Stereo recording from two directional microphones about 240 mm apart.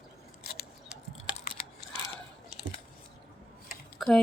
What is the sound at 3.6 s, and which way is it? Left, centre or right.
Computer keyboard, centre.